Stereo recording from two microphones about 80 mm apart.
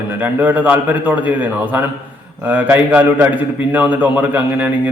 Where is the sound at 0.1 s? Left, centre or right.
Right.